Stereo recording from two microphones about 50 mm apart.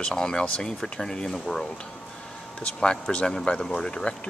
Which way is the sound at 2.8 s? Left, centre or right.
Centre.